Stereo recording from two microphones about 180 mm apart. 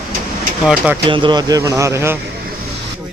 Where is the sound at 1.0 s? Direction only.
25° right (ahead or behind).